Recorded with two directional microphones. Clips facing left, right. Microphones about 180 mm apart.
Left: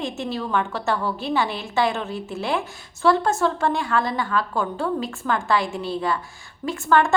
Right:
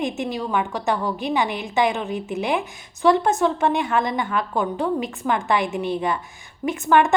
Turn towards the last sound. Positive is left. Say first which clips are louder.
# right 2 dB
turn(degrees=-20)  # may be behind; listen again after turning